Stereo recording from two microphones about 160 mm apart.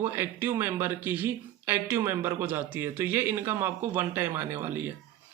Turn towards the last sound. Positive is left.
turn(degrees=-15)  # may be behind; listen again after turning